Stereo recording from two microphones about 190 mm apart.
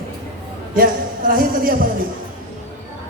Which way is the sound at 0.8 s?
50° right (ahead or behind).